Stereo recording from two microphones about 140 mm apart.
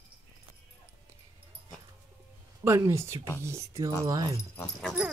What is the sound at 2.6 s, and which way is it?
Speech, 20° right (ahead or behind).